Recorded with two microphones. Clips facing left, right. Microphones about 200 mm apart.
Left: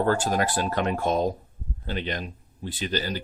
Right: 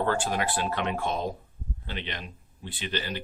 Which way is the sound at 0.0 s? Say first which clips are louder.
Left 4 dB; 40° left (ahead or behind).